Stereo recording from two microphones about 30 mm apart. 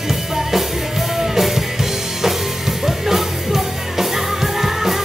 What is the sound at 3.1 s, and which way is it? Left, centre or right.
Music, centre.